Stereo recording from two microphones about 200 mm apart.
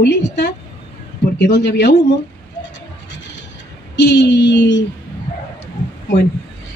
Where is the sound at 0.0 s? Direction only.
60° left (ahead or behind).